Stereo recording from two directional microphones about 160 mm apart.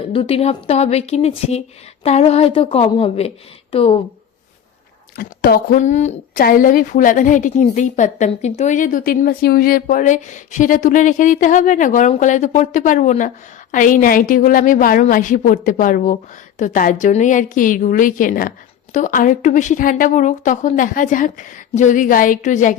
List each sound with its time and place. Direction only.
0.1 s a woman's voice: 35° left (ahead or behind)
5.1 s a woman's voice: 65° left (ahead or behind); by 6.4 s 45° left (ahead or behind)
6.4 s a woman's voice: 60° left (ahead or behind)